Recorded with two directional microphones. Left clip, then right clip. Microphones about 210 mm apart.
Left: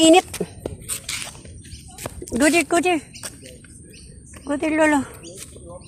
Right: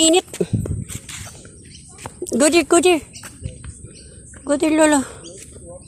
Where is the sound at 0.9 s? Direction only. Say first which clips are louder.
Left 5 dB; 40° left (ahead or behind).